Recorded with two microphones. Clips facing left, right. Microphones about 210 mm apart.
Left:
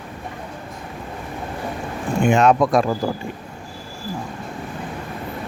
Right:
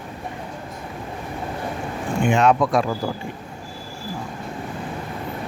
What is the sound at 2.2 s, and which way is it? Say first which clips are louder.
Speech: left 2 dB; 45° left (ahead or behind).